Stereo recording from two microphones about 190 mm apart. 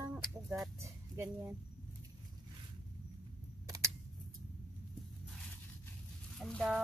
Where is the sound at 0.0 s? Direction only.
15° right (ahead or behind).